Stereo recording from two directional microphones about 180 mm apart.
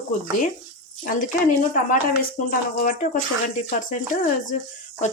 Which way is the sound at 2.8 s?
50° left (ahead or behind).